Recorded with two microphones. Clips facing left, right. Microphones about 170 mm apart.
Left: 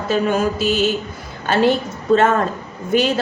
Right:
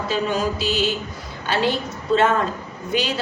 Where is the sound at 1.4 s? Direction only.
50° left (ahead or behind).